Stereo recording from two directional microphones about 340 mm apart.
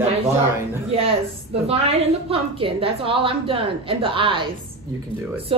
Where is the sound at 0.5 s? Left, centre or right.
Centre.